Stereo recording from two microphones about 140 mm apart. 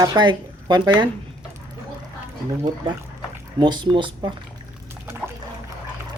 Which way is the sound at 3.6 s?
35° right (ahead or behind).